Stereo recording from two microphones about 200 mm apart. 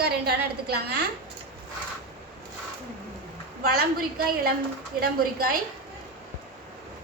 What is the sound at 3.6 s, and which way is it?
A woman's voice, 50° right (ahead or behind).